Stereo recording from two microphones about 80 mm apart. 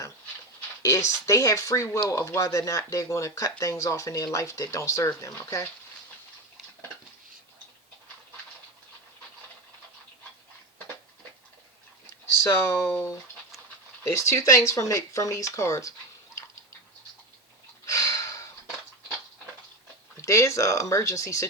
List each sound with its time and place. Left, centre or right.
0.8 s speech: left
12.4 s speech: left
17.8 s gasp: left
20.2 s speech: left